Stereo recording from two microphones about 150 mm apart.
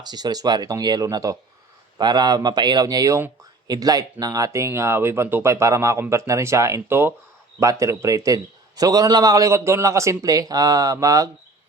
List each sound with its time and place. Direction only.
0.0 s a man's voice: 25° right (ahead or behind)